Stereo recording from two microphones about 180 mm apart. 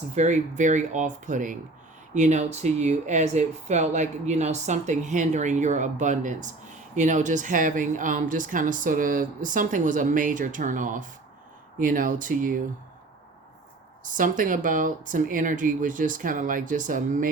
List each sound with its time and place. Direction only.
0.1 s a woman's voice: 40° right (ahead or behind)
14.0 s a woman's voice: 45° right (ahead or behind)